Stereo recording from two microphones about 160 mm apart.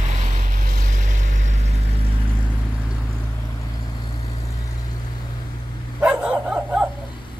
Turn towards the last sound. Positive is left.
turn(degrees=-5)  # may be behind; listen again after turning